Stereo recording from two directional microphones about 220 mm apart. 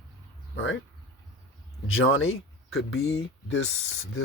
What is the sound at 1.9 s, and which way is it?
Speech, 65° left (ahead or behind).